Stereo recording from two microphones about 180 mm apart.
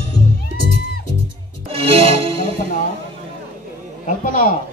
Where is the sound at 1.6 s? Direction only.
30° right (ahead or behind).